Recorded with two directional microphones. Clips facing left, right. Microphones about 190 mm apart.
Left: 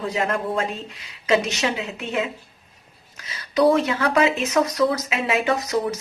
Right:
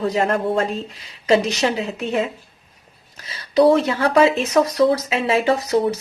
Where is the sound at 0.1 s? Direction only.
35° right (ahead or behind).